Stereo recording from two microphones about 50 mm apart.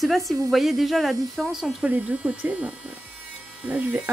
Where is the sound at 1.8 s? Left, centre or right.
Right.